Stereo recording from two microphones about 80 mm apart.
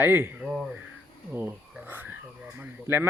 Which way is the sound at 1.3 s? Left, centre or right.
Right.